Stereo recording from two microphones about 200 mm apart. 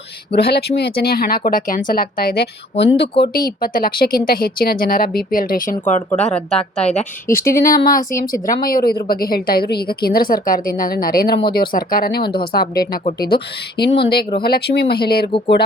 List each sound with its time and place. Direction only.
0.3 s a woman's voice: 55° left (ahead or behind); by 7.3 s 35° left (ahead or behind)
7.3 s speech: 45° left (ahead or behind)